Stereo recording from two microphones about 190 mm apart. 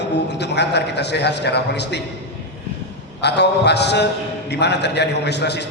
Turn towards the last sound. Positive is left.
turn(degrees=60)  # may be behind; listen again after turning